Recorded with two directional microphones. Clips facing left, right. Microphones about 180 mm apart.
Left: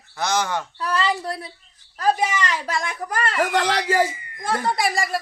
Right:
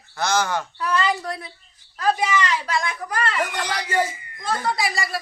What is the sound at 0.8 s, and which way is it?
Speech, 35° left (ahead or behind).